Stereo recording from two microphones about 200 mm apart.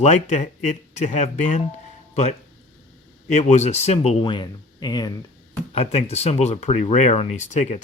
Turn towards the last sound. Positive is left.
turn(degrees=35)  # may be behind; listen again after turning